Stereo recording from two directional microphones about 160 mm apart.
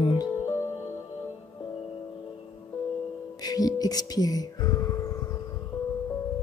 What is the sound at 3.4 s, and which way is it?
Speech, 25° left (ahead or behind).